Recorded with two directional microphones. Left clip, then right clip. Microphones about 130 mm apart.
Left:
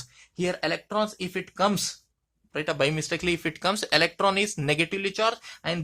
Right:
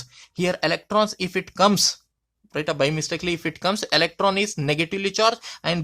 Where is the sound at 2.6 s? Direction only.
30° right (ahead or behind).